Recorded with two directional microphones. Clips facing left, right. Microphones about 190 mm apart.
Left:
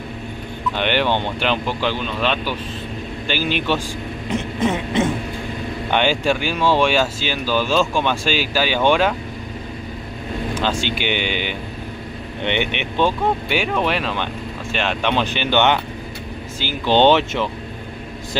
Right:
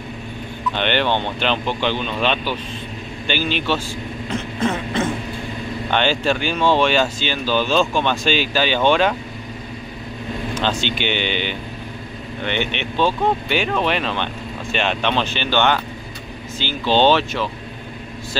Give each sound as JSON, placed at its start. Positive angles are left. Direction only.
{"t": 0.7, "sound": "speech", "side_deg": 10}
{"t": 4.3, "sound": "a sound", "side_deg": 20}
{"t": 5.9, "sound": "speech", "side_deg": 10}
{"t": 10.6, "sound": "speech", "side_deg": 10}